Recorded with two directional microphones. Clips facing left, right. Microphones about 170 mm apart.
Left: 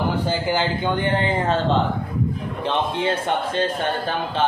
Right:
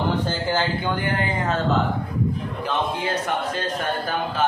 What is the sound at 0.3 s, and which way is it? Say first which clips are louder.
A man's voice: left 2 dB; 15° left (ahead or behind).